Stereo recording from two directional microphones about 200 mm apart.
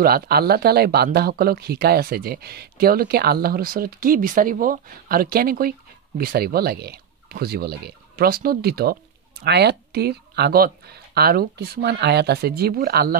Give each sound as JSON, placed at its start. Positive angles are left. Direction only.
{"t": 0.0, "sound": "speech", "side_deg": -50}